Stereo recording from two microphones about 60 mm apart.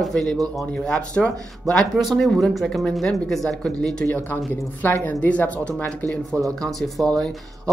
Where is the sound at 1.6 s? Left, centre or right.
Centre.